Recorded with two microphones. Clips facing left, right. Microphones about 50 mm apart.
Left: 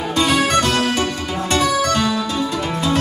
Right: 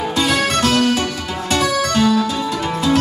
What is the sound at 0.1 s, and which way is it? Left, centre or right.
Music, centre.